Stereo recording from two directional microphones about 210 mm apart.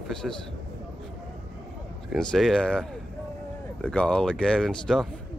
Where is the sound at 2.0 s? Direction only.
Centre (ahead or behind).